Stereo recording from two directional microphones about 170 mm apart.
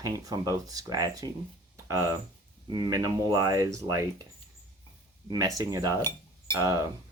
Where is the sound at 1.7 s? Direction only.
20° right (ahead or behind).